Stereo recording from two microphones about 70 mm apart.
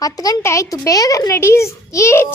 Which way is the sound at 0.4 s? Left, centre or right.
Left.